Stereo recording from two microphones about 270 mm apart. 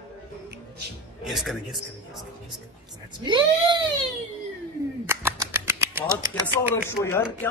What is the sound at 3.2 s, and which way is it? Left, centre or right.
Speech, centre.